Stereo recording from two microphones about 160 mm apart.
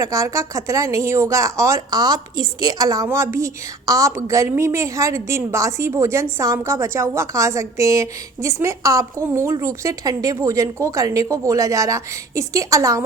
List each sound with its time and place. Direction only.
0.0 s a woman's voice: 20° right (ahead or behind)